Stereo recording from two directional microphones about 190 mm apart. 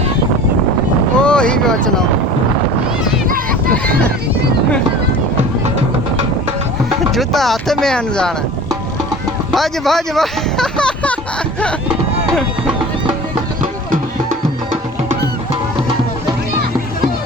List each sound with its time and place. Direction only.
1.2 s vehicle: 5° left (ahead or behind)
3.2 s a sound: 50° right (ahead or behind)
3.8 s speech: 5° left (ahead or behind)
7.1 s speech: centre (ahead or behind)
9.5 s speech: centre (ahead or behind)
13.6 s music: 40° right (ahead or behind)